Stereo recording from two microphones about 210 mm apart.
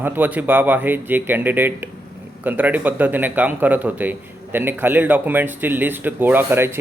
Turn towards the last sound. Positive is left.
turn(degrees=-10)  # may be behind; listen again after turning